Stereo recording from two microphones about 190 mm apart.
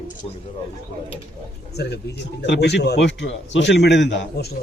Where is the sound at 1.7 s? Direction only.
60° left (ahead or behind).